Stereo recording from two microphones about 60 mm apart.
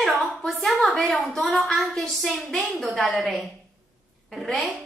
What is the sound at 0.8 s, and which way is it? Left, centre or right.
A woman's voice, centre.